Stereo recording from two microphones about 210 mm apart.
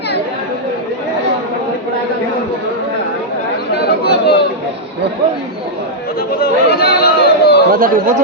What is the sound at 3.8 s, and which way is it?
Chatter, 50° left (ahead or behind).